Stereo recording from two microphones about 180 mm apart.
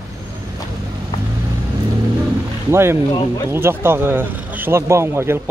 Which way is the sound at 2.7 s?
15° right (ahead or behind).